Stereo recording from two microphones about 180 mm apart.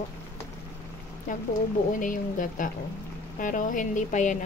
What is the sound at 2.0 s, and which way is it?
Speech, 45° left (ahead or behind).